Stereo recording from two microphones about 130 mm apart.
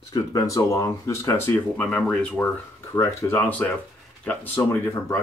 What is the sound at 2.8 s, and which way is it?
Speech, 20° left (ahead or behind).